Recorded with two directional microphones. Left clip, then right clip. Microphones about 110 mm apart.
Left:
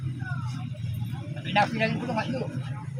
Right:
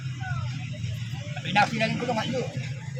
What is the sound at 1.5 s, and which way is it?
Speech, 40° right (ahead or behind).